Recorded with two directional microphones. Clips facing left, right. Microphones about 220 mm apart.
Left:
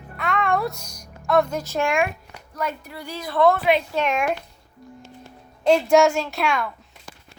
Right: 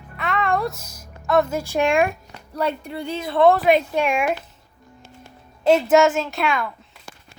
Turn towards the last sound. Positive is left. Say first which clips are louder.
# right 1 dB
turn(degrees=0)  # may be behind; listen again after turning